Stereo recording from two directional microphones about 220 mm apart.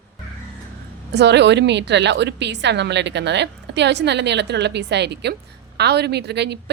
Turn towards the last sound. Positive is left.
turn(degrees=-50)  # may be behind; listen again after turning